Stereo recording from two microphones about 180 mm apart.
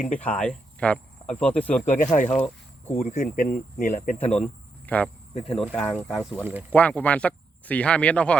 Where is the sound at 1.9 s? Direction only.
45° left (ahead or behind).